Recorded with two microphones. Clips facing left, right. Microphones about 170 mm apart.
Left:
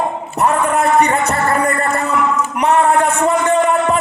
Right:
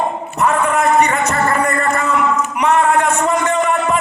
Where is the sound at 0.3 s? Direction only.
35° left (ahead or behind).